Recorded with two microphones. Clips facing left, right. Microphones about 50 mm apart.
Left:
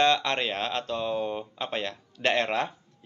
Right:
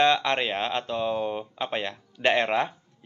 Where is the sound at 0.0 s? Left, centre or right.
Centre.